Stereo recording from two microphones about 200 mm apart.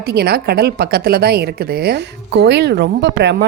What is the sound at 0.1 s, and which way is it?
A woman's voice, 55° right (ahead or behind).